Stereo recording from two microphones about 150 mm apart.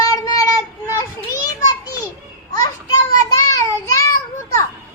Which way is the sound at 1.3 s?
25° left (ahead or behind).